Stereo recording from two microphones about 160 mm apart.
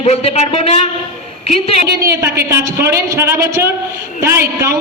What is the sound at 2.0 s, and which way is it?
A woman's voice, 20° right (ahead or behind).